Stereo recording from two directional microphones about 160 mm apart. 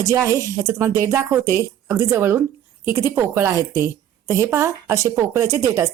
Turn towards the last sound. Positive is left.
turn(degrees=-20)  # may be behind; listen again after turning